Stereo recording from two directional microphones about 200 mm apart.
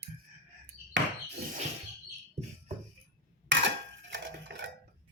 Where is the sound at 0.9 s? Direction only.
65° right (ahead or behind).